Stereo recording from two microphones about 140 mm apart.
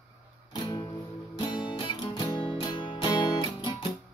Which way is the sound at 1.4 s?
35° left (ahead or behind).